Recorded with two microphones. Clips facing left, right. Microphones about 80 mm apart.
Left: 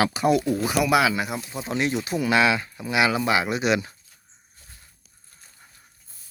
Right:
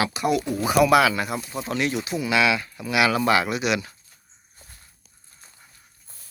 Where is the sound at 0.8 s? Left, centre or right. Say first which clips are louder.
Right 4 dB; centre.